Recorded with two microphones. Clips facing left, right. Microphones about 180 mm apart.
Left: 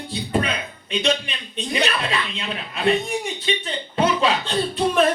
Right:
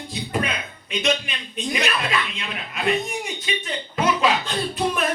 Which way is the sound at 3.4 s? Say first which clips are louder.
Left 3 dB; 30° left (ahead or behind).